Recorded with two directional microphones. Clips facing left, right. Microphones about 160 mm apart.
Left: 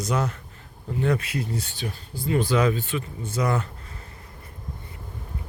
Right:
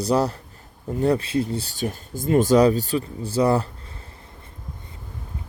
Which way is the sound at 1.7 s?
45° right (ahead or behind).